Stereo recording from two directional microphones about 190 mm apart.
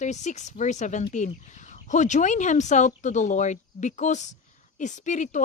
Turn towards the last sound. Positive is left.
turn(degrees=40)  # may be behind; listen again after turning